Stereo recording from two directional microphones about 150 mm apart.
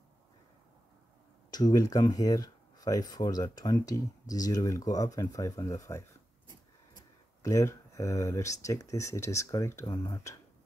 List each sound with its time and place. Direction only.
1.5 s speech: 25° left (ahead or behind)
7.4 s speech: 20° left (ahead or behind)